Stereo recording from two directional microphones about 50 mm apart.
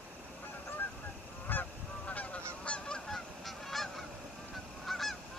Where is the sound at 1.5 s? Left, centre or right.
Left.